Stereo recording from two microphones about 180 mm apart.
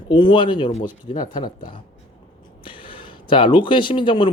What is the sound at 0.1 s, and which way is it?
Speech, 25° left (ahead or behind).